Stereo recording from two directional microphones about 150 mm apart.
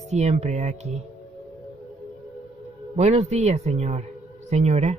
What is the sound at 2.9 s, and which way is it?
Speech, 45° right (ahead or behind).